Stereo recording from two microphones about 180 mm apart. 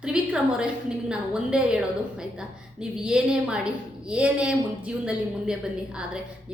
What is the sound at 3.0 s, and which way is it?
A woman's voice, 5° right (ahead or behind).